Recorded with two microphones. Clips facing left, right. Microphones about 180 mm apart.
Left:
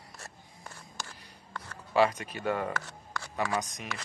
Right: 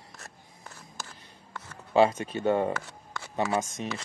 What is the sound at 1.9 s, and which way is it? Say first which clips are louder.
Speech: right 4 dB; 25° right (ahead or behind).